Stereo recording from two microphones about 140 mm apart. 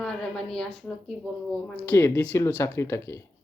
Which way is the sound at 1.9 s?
20° left (ahead or behind).